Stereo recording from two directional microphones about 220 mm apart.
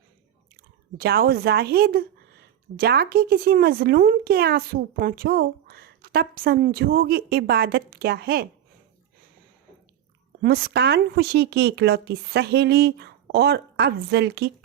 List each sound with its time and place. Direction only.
0.9 s a woman's voice: 45° right (ahead or behind)
10.4 s a woman's voice: 45° right (ahead or behind)